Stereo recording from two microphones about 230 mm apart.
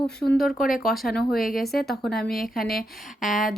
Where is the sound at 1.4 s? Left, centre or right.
Left.